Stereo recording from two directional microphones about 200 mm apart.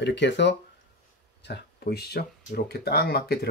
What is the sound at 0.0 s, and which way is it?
Speech, 60° left (ahead or behind).